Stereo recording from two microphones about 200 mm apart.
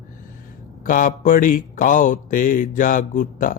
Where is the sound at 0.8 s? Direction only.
40° left (ahead or behind).